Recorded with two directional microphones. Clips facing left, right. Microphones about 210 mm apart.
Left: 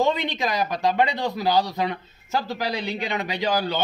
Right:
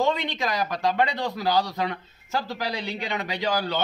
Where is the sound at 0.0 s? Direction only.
20° left (ahead or behind).